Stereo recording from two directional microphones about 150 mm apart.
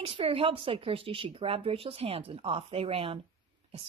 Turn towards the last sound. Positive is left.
turn(degrees=-40)  # may be behind; listen again after turning